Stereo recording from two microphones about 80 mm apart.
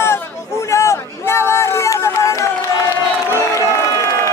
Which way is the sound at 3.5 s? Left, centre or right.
Left.